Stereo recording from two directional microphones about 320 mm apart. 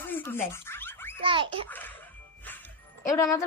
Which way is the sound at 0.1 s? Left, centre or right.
Centre.